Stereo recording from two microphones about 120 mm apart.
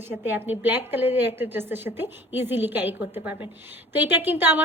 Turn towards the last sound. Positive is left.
turn(degrees=-15)  # may be behind; listen again after turning